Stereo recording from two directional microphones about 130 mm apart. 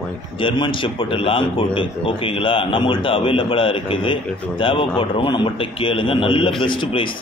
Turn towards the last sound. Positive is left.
turn(degrees=40)  # may be behind; listen again after turning